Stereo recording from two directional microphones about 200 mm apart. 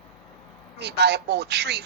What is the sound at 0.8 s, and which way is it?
Speech, 55° right (ahead or behind).